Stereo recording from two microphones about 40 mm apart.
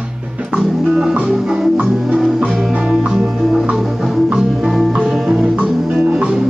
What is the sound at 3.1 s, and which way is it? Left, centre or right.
Music, centre.